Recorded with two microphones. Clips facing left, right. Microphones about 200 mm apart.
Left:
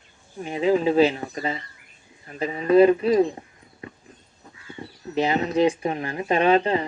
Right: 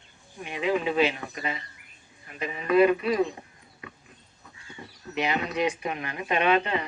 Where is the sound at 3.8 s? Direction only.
30° left (ahead or behind).